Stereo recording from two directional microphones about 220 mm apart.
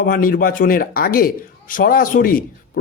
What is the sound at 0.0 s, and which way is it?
Speech, 40° left (ahead or behind).